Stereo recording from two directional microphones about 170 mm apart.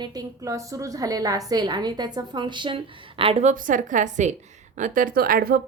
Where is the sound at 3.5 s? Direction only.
50° right (ahead or behind).